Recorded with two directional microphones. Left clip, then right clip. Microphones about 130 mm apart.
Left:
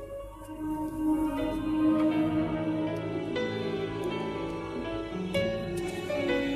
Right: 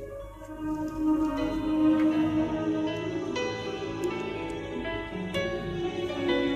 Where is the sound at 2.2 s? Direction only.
35° left (ahead or behind).